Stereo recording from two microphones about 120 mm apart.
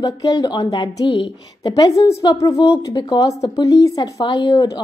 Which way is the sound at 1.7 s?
25° left (ahead or behind).